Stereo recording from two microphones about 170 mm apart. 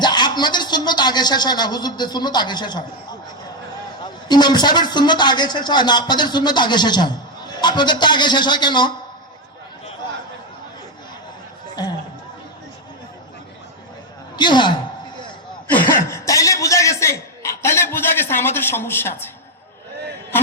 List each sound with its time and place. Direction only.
0.0 s a man's voice: 25° left (ahead or behind)
14.3 s a man's voice: 25° left (ahead or behind)
16.0 s chuckle: 20° left (ahead or behind)